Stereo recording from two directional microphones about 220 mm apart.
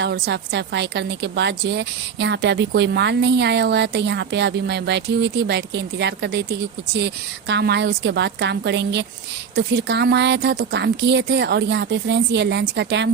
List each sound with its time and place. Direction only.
0.0 s a woman's voice: 50° right (ahead or behind)